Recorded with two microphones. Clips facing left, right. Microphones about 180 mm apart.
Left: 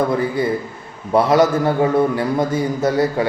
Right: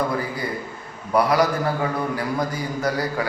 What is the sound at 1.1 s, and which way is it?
A man's voice, 25° left (ahead or behind).